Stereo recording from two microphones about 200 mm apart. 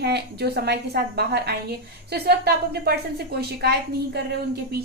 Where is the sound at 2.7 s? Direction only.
50° right (ahead or behind).